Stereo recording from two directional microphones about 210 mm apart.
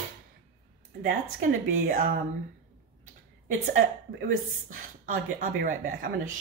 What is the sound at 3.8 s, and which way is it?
A woman's voice, 40° right (ahead or behind).